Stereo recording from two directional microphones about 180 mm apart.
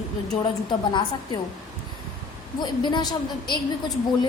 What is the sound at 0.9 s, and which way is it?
Speech, 25° left (ahead or behind).